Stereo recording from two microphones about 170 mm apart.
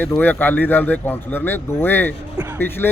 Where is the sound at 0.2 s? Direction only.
10° left (ahead or behind).